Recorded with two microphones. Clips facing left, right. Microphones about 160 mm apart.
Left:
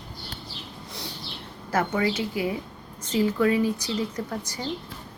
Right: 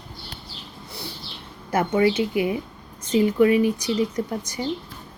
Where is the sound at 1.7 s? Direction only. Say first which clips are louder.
Right 5 dB; 20° right (ahead or behind).